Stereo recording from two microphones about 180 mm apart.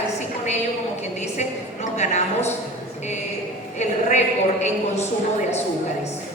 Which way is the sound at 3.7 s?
40° left (ahead or behind).